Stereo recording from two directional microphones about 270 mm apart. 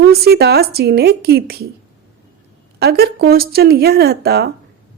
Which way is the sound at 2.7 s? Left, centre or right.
Right.